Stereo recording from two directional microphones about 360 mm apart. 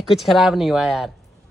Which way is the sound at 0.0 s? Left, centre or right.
Centre.